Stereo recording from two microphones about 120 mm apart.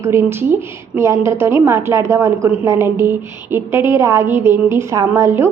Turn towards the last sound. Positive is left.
turn(degrees=-20)  # may be behind; listen again after turning